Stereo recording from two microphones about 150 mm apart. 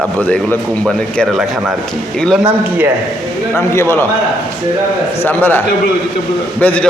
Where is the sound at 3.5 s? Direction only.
15° left (ahead or behind).